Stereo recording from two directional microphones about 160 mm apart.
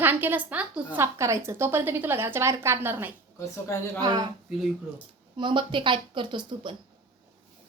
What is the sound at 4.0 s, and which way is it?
Speech, 25° right (ahead or behind).